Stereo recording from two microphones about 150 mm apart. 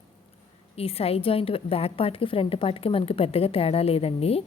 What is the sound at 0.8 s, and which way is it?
A woman's voice, 40° left (ahead or behind).